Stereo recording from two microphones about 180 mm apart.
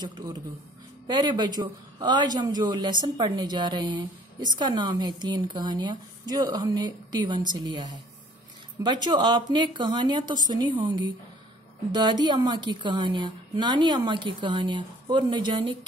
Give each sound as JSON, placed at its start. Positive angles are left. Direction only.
{"t": 0.0, "sound": "a man's voice", "side_deg": -20}